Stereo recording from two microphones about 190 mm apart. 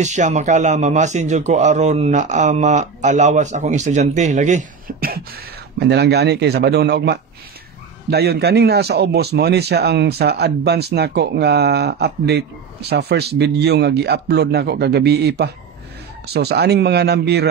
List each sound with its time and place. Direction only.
0.0 s a man's voice: 40° right (ahead or behind); by 17.5 s 60° right (ahead or behind)